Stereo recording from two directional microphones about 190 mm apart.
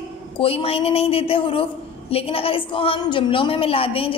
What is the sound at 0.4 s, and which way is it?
A woman's voice, 30° left (ahead or behind).